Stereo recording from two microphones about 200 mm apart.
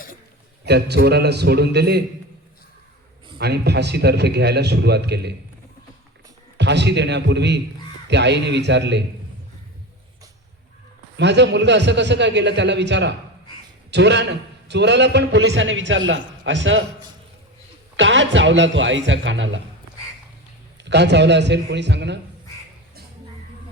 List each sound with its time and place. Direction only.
0.6 s a man's voice: 55° right (ahead or behind)
3.3 s a man's voice: 55° right (ahead or behind)
6.6 s a man's voice: 60° right (ahead or behind)
11.2 s a man's voice: 60° right (ahead or behind)
17.9 s a man's voice: 65° right (ahead or behind)
20.9 s a man's voice: 60° right (ahead or behind)